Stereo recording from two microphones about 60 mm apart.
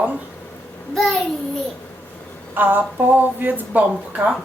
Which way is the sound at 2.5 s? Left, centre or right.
Right.